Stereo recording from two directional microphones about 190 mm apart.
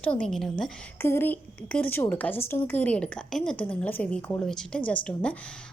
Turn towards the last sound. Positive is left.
turn(degrees=5)  # may be behind; listen again after turning